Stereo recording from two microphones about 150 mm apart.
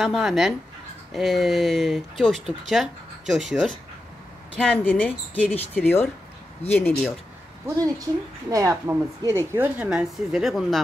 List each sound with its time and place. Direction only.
0.0 s speech: centre (ahead or behind)
7.6 s a woman's voice: 25° right (ahead or behind)
9.5 s speech: 10° right (ahead or behind)